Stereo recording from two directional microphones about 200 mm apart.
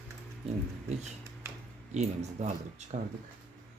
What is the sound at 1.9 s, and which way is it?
Speech, 35° right (ahead or behind).